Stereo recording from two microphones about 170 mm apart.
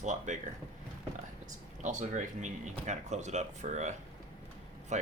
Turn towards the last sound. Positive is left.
turn(degrees=-45)  # may be behind; listen again after turning